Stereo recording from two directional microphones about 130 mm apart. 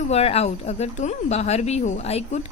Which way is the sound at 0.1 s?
50° left (ahead or behind).